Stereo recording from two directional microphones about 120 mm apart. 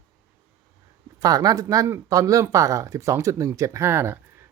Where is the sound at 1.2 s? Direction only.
30° right (ahead or behind).